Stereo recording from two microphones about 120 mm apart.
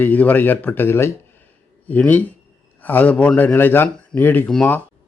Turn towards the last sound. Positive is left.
turn(degrees=10)  # may be behind; listen again after turning